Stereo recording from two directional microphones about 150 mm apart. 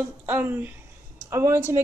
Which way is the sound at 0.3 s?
15° right (ahead or behind).